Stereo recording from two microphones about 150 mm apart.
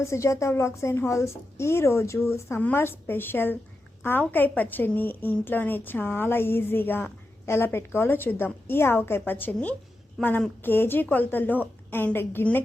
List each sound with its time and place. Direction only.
0.0 s a woman's voice: 20° left (ahead or behind)